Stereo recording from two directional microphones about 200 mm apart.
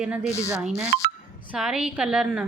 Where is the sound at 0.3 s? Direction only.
15° left (ahead or behind).